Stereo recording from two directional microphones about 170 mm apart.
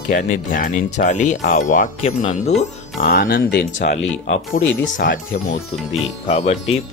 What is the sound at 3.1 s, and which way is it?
Speech, 55° left (ahead or behind).